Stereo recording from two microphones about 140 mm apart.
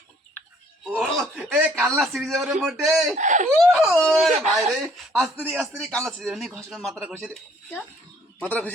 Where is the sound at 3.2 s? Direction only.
60° right (ahead or behind).